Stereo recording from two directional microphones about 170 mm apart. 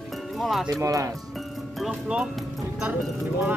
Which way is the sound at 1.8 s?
5° right (ahead or behind).